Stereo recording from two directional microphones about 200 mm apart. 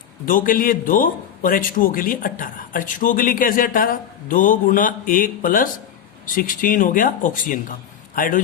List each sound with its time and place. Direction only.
0.3 s a man's voice: 45° left (ahead or behind)